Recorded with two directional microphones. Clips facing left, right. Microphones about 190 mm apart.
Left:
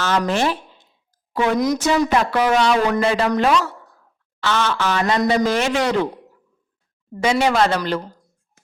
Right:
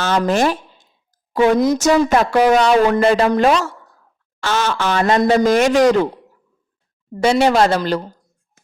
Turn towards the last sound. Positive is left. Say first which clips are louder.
# right 3 dB
turn(degrees=-35)  # may be behind; listen again after turning